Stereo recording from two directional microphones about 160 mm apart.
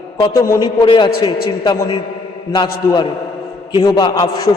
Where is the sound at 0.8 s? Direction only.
35° left (ahead or behind).